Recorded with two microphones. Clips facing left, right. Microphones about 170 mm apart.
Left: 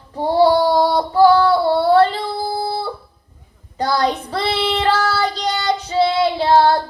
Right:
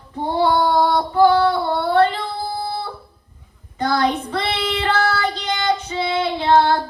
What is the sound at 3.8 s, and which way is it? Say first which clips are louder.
Child singing: left 1 dB; 35° left (ahead or behind).